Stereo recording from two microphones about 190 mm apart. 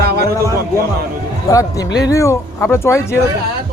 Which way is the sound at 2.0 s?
15° left (ahead or behind).